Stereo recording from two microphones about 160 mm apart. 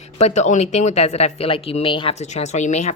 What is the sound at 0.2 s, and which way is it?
A woman's voice, 45° left (ahead or behind).